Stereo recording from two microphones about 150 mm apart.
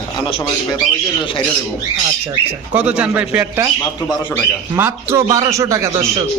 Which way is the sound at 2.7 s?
10° right (ahead or behind).